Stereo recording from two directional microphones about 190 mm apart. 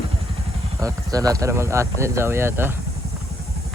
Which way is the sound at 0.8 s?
20° right (ahead or behind).